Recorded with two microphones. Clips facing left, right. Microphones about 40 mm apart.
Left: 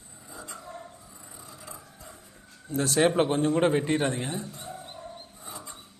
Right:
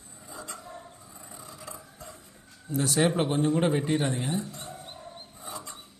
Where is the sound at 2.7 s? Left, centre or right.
Left.